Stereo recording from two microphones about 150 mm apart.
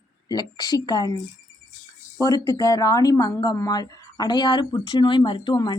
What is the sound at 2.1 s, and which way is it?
A woman's voice, 25° left (ahead or behind).